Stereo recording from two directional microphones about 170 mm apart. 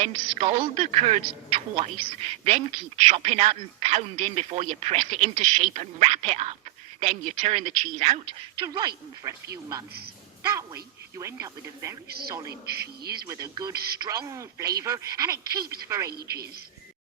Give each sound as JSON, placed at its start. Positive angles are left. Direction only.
{"t": 0.0, "sound": "speech", "side_deg": -40}
{"t": 8.6, "sound": "speech", "side_deg": -25}
{"t": 11.2, "sound": "speech", "side_deg": -20}
{"t": 12.5, "sound": "a man's voice", "side_deg": -65}
{"t": 13.2, "sound": "speech", "side_deg": -20}
{"t": 13.7, "sound": "speech", "side_deg": -65}
{"t": 14.0, "sound": "speech", "side_deg": -20}
{"t": 16.1, "sound": "a man's voice", "side_deg": -65}